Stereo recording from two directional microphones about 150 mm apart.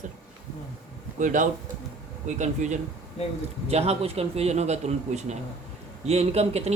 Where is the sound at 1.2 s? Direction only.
60° right (ahead or behind).